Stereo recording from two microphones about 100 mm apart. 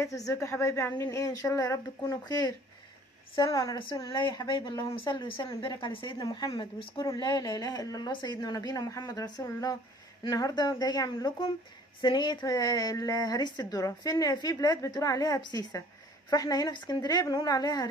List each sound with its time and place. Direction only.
0.0 s a woman's voice: 35° left (ahead or behind)
1.2 s a woman's voice: 35° left (ahead or behind)
3.7 s a woman's voice: 50° left (ahead or behind)
5.8 s speech: 55° left (ahead or behind)
6.1 s a woman's voice: 40° left (ahead or behind)
6.6 s speech: 55° left (ahead or behind)
7.1 s a woman's voice: 45° left (ahead or behind)